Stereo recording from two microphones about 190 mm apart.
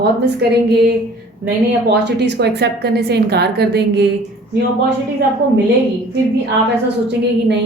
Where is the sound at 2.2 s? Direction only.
60° right (ahead or behind).